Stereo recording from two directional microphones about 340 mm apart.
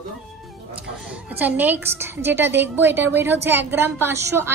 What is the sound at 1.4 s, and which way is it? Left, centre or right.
A woman's voice, centre.